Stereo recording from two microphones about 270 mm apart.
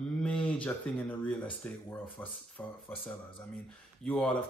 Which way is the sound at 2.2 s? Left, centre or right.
Centre.